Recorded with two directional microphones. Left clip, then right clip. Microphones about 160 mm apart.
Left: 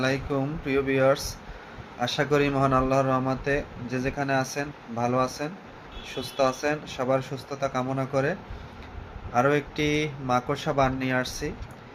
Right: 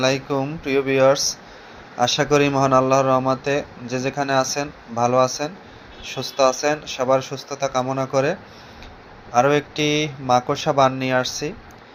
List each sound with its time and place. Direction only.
0.0 s speech: 25° right (ahead or behind)